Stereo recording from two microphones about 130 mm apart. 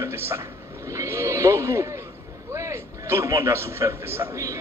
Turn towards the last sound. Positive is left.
turn(degrees=-20)  # may be behind; listen again after turning